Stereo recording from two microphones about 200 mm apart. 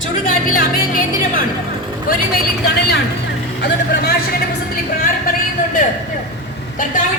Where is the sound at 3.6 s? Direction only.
55° left (ahead or behind).